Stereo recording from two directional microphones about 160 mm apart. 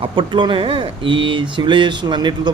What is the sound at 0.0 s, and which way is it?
Speech, 30° right (ahead or behind).